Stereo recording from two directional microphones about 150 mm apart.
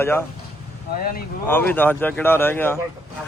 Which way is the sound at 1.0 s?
75° left (ahead or behind).